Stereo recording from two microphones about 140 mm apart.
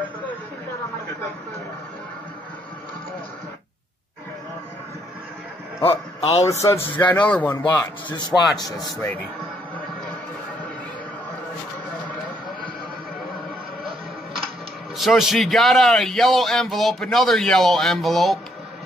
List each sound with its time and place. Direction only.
5.9 s a man's voice: 45° left (ahead or behind)
6.9 s a man's voice: 35° left (ahead or behind)
7.2 s speech: 10° left (ahead or behind)
7.5 s a man's voice: 30° left (ahead or behind)
15.0 s speech: centre (ahead or behind)